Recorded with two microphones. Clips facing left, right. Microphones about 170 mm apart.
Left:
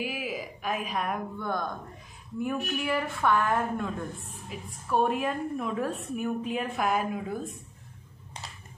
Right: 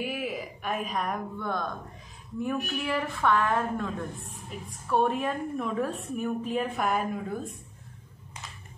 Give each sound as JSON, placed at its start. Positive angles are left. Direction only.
{"t": 0.0, "sound": "a woman's voice", "side_deg": 0}